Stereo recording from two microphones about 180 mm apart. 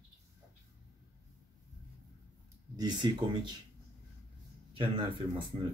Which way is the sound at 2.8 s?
25° right (ahead or behind).